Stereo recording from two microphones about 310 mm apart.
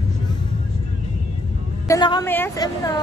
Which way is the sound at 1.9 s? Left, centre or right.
Centre.